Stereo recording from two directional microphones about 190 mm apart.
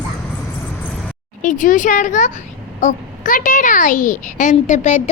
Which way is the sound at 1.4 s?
45° left (ahead or behind).